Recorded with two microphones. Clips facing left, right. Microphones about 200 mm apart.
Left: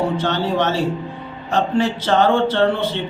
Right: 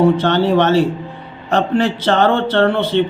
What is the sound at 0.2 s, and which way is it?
A man's voice, 65° right (ahead or behind).